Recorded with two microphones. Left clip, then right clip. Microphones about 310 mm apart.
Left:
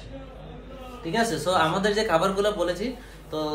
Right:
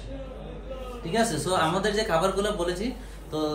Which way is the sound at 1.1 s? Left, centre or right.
Centre.